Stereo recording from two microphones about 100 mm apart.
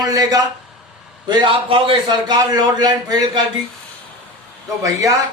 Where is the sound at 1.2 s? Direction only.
55° right (ahead or behind).